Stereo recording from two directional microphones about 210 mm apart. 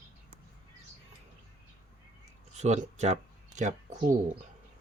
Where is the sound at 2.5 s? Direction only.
35° right (ahead or behind).